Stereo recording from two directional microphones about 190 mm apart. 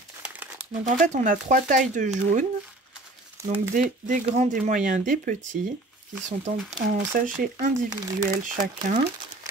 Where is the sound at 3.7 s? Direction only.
45° right (ahead or behind).